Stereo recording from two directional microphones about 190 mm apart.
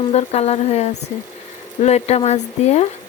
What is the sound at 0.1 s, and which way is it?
Speech, 35° left (ahead or behind).